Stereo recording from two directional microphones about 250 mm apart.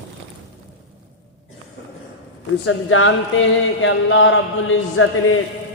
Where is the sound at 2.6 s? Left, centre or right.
Left.